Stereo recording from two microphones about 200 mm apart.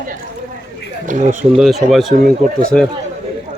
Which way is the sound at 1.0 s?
35° right (ahead or behind).